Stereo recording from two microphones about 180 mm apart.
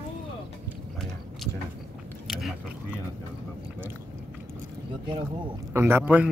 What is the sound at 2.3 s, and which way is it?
Speech, centre (ahead or behind).